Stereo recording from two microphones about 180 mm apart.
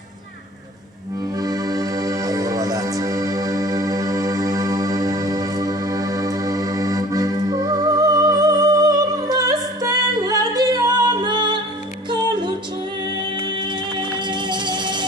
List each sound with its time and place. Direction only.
1.4 s music: 20° right (ahead or behind)
14.1 s music: 25° right (ahead or behind)